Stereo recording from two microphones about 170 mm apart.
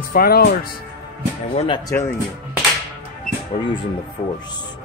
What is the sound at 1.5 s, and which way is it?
Speech, 30° left (ahead or behind).